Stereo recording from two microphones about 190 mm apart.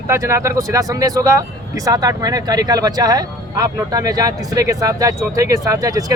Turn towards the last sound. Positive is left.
turn(degrees=-20)  # may be behind; listen again after turning